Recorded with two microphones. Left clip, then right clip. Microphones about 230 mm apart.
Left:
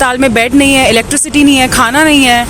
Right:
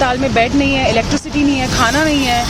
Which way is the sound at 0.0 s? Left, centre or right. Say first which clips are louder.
Left 4 dB; left.